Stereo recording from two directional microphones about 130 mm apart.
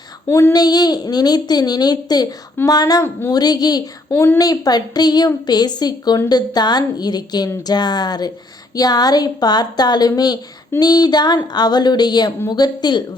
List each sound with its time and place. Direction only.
0.3 s speech: 15° left (ahead or behind)
0.5 s a woman's voice: 30° left (ahead or behind)
3.0 s speech: 15° left (ahead or behind)
3.3 s a woman's voice: 30° left (ahead or behind)
4.1 s speech: 15° left (ahead or behind)
4.4 s a woman's voice: 30° left (ahead or behind)